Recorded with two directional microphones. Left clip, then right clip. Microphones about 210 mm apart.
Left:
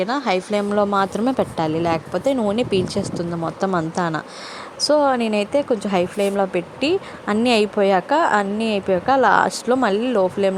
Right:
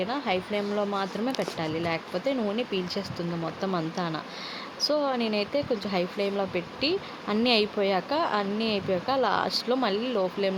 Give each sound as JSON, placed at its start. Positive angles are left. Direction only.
{"t": 0.0, "sound": "speech", "side_deg": 30}